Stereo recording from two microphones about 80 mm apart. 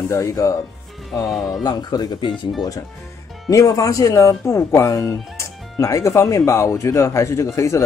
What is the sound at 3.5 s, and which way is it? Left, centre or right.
Speech, left.